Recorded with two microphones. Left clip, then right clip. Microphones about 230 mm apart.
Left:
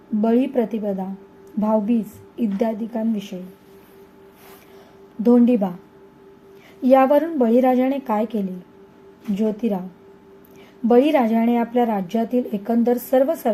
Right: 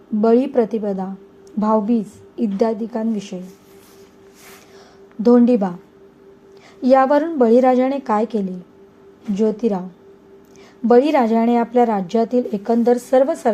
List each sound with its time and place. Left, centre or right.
0.2 s speech: centre
5.2 s speech: centre
6.8 s speech: centre
10.8 s speech: centre